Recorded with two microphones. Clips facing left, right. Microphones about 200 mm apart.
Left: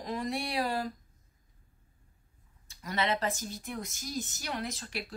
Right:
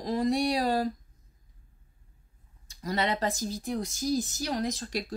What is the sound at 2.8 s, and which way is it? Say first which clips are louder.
Speech: right 2 dB; 35° right (ahead or behind).